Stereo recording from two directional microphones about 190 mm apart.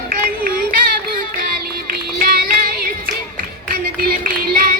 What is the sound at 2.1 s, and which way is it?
Female singing, 50° right (ahead or behind).